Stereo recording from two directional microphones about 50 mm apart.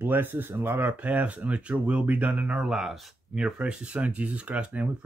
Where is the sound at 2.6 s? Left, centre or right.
Centre.